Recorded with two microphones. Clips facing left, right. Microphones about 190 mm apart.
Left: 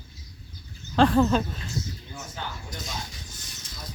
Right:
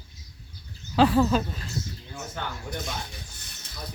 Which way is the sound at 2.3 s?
60° right (ahead or behind).